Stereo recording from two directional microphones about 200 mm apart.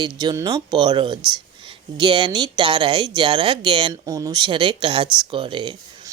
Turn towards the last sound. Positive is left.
turn(degrees=-25)  # may be behind; listen again after turning